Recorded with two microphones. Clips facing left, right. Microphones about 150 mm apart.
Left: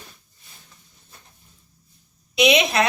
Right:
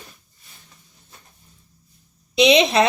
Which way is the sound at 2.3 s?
25° right (ahead or behind).